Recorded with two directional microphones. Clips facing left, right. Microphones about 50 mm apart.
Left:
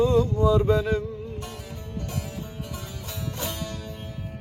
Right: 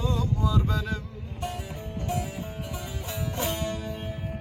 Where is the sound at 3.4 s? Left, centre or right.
Right.